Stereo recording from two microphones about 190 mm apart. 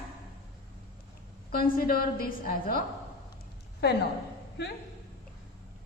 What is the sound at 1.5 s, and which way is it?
A woman's voice, 50° left (ahead or behind).